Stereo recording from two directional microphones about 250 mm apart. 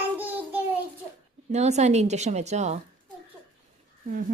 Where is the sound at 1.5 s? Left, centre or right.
Right.